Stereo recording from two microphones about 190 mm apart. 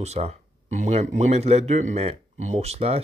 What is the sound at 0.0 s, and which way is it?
Speech, 35° right (ahead or behind).